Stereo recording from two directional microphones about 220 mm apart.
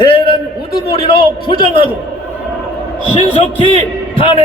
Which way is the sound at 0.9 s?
25° left (ahead or behind).